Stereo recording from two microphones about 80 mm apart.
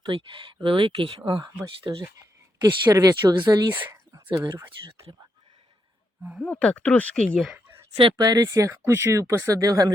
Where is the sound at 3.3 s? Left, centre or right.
Right.